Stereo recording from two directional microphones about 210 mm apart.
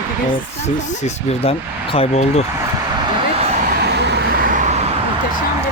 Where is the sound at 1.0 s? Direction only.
25° left (ahead or behind).